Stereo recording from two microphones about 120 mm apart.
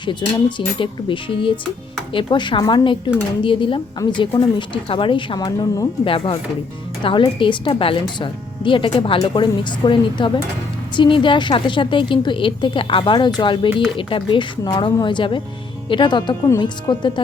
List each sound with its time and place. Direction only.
0.0 s a woman's voice: 40° left (ahead or behind)
5.5 s speech: 25° left (ahead or behind)
6.1 s a woman's voice: 50° left (ahead or behind)